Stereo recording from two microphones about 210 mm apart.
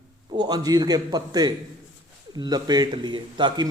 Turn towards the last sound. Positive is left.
turn(degrees=-20)  # may be behind; listen again after turning